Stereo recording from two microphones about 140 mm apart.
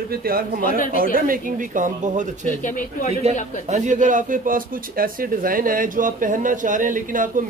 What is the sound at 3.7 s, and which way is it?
Speech, 60° right (ahead or behind).